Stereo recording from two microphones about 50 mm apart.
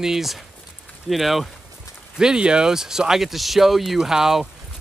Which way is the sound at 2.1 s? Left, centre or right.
Centre.